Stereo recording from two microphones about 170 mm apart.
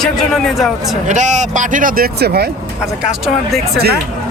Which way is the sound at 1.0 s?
45° right (ahead or behind).